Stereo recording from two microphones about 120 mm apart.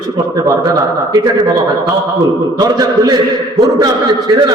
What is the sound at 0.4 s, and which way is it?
A man's voice, 30° right (ahead or behind).